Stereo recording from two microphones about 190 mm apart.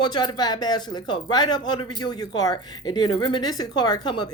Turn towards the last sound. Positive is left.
turn(degrees=25)  # may be behind; listen again after turning